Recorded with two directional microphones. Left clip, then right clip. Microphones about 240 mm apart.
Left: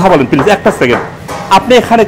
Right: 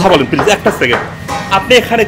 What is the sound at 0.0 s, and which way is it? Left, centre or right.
Speech, left.